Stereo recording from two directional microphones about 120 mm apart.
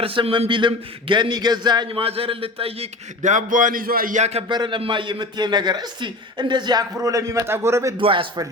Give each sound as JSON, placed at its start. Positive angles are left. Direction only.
{"t": 0.0, "sound": "speech", "side_deg": -45}
{"t": 3.2, "sound": "a man's voice", "side_deg": -90}
{"t": 4.1, "sound": "speech", "side_deg": -65}
{"t": 4.4, "sound": "a man's voice", "side_deg": -40}
{"t": 7.9, "sound": "speech", "side_deg": -45}